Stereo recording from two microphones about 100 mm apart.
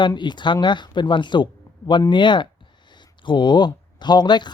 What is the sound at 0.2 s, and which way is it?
A man's voice, 50° left (ahead or behind).